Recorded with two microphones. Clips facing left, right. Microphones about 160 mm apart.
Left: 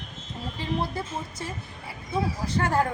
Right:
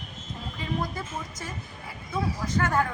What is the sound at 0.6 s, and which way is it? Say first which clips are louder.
Speech: left 2 dB; 30° left (ahead or behind).